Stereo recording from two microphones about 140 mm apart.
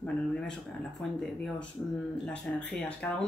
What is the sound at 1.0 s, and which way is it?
Speech, 5° left (ahead or behind).